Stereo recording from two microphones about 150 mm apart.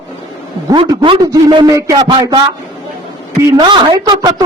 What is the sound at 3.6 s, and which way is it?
Speech, 30° right (ahead or behind).